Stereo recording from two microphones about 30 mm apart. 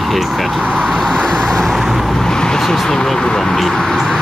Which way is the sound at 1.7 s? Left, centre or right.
Centre.